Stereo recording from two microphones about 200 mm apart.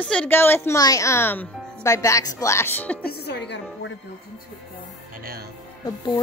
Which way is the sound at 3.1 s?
55° left (ahead or behind).